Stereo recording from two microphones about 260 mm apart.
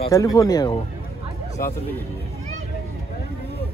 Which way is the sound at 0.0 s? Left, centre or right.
Centre.